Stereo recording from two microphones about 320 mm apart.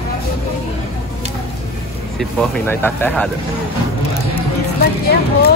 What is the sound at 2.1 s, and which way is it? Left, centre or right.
Speech, centre.